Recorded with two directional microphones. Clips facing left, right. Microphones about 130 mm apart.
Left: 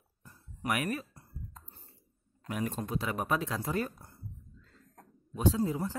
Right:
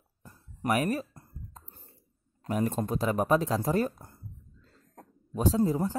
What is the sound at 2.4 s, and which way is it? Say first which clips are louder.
Speech: right 6 dB; 35° right (ahead or behind).